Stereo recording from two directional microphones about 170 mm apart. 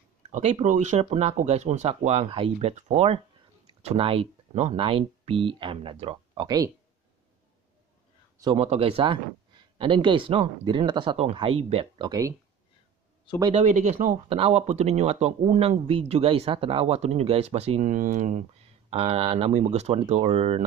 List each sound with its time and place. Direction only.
0.3 s speech: 45° right (ahead or behind); by 6.7 s 25° right (ahead or behind)
8.5 s speech: 35° right (ahead or behind); by 12.4 s 20° right (ahead or behind)
13.6 s speech: 40° right (ahead or behind)
18.9 s speech: 35° right (ahead or behind)